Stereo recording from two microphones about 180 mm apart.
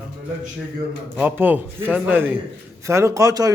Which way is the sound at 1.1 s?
10° right (ahead or behind).